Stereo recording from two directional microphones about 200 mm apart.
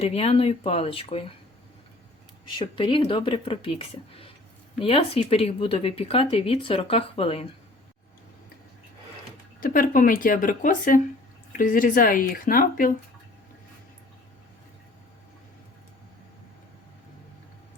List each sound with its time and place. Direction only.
0.0 s speech: 30° left (ahead or behind)
2.6 s speech: 25° left (ahead or behind)
9.6 s speech: 45° left (ahead or behind)